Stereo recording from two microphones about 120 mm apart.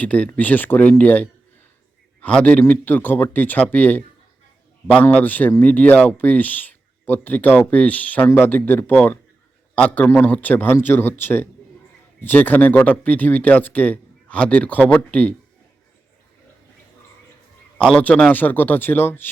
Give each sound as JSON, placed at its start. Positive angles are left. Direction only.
{"t": 0.0, "sound": "speech", "side_deg": 10}
{"t": 17.7, "sound": "speech", "side_deg": 10}